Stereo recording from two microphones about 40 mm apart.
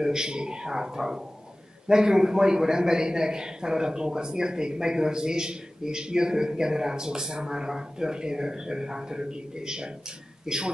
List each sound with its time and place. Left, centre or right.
0.0 s a man's voice: centre